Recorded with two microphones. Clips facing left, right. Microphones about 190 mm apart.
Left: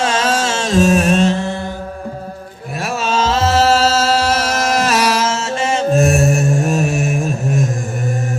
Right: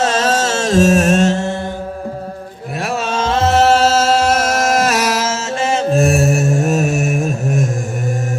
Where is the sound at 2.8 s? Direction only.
60° right (ahead or behind); by 5.5 s 40° right (ahead or behind).